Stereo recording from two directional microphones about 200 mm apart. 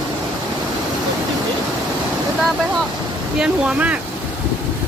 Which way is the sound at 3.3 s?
5° right (ahead or behind).